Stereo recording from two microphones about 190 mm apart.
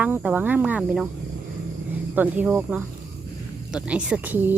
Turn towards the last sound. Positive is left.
turn(degrees=-10)  # may be behind; listen again after turning